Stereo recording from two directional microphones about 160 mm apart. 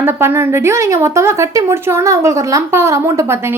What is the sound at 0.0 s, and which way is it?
A woman's voice, 15° right (ahead or behind).